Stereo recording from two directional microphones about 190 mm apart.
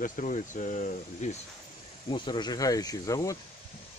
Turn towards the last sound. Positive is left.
turn(degrees=15)  # may be behind; listen again after turning